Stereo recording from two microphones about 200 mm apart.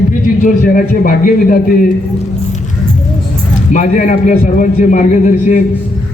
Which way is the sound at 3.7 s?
40° left (ahead or behind).